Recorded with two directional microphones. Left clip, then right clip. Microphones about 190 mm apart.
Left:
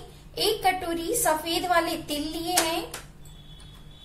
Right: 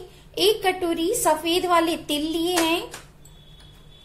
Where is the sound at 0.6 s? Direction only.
30° right (ahead or behind).